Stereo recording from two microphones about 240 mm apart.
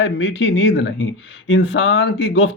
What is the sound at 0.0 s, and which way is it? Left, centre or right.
Speech, left.